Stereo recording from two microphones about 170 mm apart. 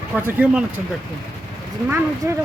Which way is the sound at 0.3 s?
10° right (ahead or behind).